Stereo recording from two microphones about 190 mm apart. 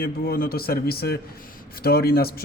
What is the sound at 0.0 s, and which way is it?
A man's voice, 50° left (ahead or behind).